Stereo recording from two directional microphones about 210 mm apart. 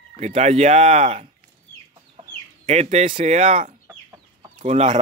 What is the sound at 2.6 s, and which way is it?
Speech, 30° right (ahead or behind).